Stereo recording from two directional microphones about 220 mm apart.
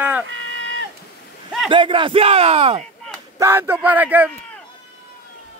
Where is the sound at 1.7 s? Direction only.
20° right (ahead or behind).